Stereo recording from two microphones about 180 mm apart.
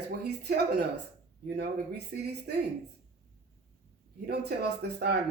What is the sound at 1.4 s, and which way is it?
Speech, 65° right (ahead or behind).